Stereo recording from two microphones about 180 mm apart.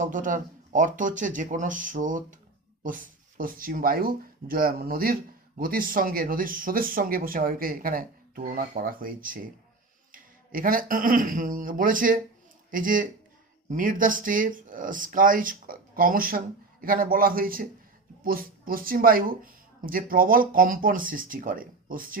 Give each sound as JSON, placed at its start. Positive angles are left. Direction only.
{"t": 0.0, "sound": "speech", "side_deg": -45}